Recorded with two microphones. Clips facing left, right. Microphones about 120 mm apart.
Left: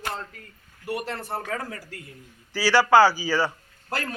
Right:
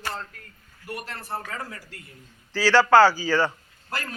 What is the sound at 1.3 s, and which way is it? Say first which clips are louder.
Speech: left 1 dB; 55° left (ahead or behind).